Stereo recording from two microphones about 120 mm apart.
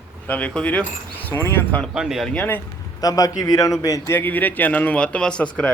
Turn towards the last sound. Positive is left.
turn(degrees=10)  # may be behind; listen again after turning